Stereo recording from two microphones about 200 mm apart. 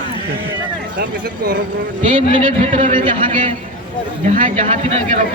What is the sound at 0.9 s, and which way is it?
Speech, 50° right (ahead or behind).